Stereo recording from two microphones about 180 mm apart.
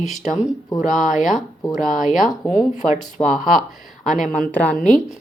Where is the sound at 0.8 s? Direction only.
45° left (ahead or behind).